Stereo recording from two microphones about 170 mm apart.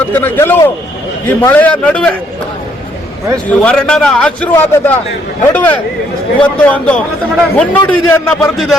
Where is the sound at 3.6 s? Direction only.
5° left (ahead or behind).